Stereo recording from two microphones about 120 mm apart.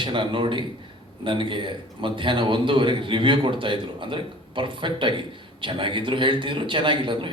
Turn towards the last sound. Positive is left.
turn(degrees=-45)  # may be behind; listen again after turning